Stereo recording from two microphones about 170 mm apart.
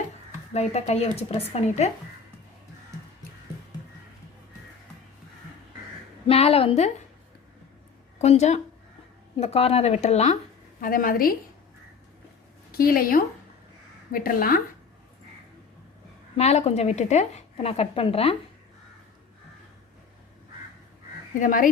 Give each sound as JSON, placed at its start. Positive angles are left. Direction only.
{"t": 0.5, "sound": "a woman's voice", "side_deg": 40}
{"t": 6.2, "sound": "a woman's voice", "side_deg": 35}
{"t": 8.2, "sound": "a woman's voice", "side_deg": 40}
{"t": 10.8, "sound": "a woman's voice", "side_deg": 55}
{"t": 12.7, "sound": "a woman's voice", "side_deg": 60}
{"t": 16.4, "sound": "a woman's voice", "side_deg": 40}
{"t": 21.3, "sound": "speech", "side_deg": 50}